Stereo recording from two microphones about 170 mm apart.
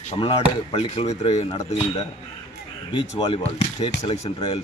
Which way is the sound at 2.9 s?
30° left (ahead or behind).